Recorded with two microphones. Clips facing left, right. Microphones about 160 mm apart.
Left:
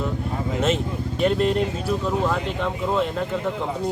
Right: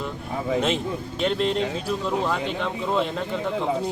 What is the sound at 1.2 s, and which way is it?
A man's voice, 5° left (ahead or behind).